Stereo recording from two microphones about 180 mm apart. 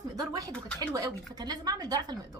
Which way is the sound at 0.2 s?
20° right (ahead or behind).